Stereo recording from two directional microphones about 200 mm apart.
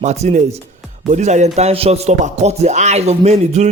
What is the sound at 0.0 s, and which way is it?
Speech, 35° right (ahead or behind).